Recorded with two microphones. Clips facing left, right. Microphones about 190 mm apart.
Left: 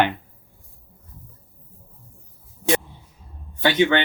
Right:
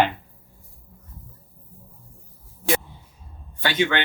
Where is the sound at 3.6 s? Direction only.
20° left (ahead or behind).